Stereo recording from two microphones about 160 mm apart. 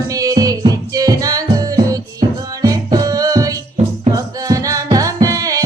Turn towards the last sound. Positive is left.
turn(degrees=-20)  # may be behind; listen again after turning